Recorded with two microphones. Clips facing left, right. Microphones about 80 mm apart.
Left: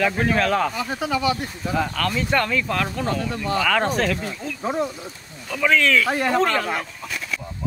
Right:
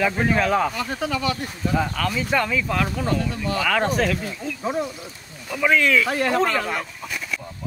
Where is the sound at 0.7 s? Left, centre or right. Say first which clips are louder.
Left 1 dB; centre.